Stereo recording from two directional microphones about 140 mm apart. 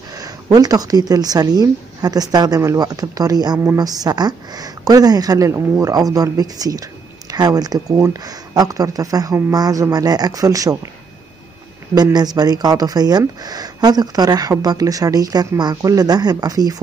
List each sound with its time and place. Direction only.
0.1 s speech: 25° right (ahead or behind)
11.9 s speech: 30° right (ahead or behind)